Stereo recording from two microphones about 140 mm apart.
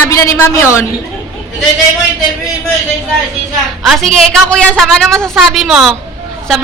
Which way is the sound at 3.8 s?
Centre (ahead or behind).